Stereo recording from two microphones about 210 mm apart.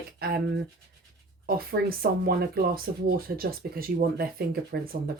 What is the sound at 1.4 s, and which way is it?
Speech, 45° right (ahead or behind).